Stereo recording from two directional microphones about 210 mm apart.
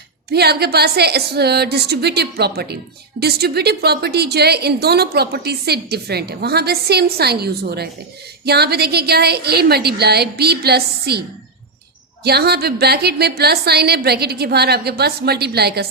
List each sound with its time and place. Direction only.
0.3 s a woman's voice: 50° right (ahead or behind)
12.2 s a woman's voice: 50° right (ahead or behind)